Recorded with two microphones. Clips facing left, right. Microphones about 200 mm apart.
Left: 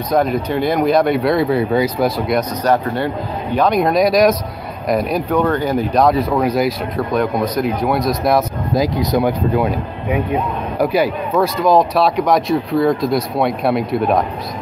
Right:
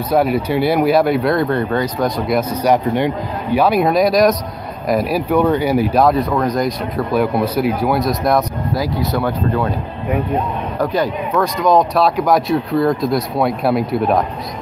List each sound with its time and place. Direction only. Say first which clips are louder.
0.1 s speech: right 1 dB; 10° right (ahead or behind)
2.6 s speech: right 2 dB; 15° right (ahead or behind); by 8.5 s centre (ahead or behind)
8.7 s speech: left 4 dB; 15° left (ahead or behind); by 14.2 s centre (ahead or behind)